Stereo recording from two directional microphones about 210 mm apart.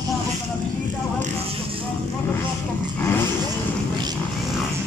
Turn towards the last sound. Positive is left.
turn(degrees=10)  # may be behind; listen again after turning